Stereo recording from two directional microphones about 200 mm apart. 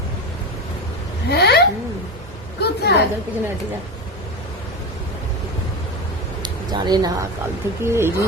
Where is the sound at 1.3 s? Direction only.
55° left (ahead or behind).